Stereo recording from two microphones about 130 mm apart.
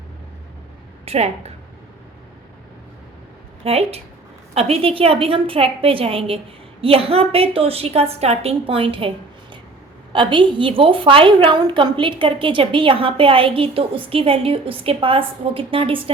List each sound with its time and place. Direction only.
1.0 s a woman's voice: 55° right (ahead or behind)
3.6 s a woman's voice: 50° right (ahead or behind)